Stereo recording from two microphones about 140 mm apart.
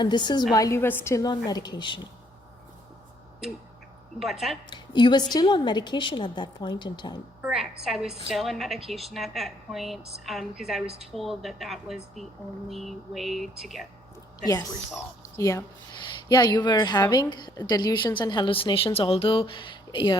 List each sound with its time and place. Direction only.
0.0 s a woman's voice: 30° left (ahead or behind)
4.2 s a woman's voice: centre (ahead or behind)
4.7 s a woman's voice: 35° left (ahead or behind)
7.4 s a woman's voice: centre (ahead or behind)
15.4 s a woman's voice: 20° left (ahead or behind)